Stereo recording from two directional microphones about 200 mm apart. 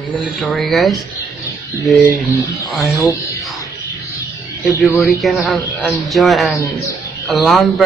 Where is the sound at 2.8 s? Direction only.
15° left (ahead or behind).